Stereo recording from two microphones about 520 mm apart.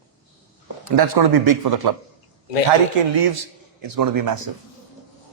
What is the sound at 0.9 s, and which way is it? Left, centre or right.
Speech, right.